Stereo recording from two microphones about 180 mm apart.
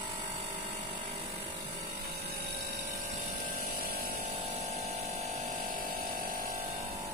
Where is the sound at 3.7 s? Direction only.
55° right (ahead or behind).